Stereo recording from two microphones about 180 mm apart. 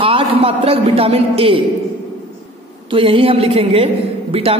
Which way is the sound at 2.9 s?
30° right (ahead or behind).